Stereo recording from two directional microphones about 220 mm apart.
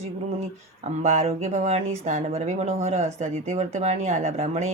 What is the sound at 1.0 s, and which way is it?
Speech, 30° right (ahead or behind).